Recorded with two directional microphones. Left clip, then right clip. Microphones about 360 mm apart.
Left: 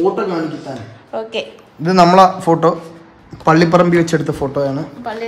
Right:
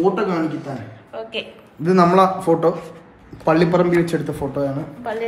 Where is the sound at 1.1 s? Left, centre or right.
Centre.